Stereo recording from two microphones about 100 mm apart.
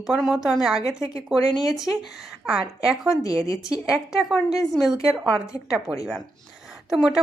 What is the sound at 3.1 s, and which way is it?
Speech, 35° left (ahead or behind).